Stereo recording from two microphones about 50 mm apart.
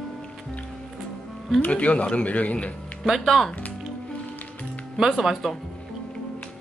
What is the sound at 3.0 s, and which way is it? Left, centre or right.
Speech, centre.